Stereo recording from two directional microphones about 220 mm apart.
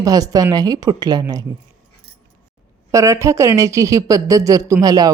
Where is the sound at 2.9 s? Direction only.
15° right (ahead or behind).